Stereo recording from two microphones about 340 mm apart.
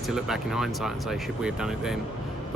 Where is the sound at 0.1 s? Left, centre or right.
Centre.